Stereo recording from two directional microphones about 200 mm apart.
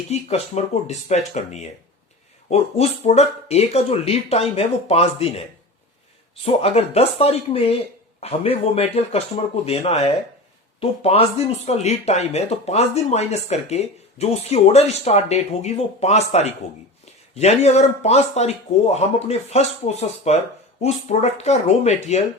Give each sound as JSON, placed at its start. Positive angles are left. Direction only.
{"t": 0.1, "sound": "speech", "side_deg": 30}
{"t": 6.4, "sound": "speech", "side_deg": 30}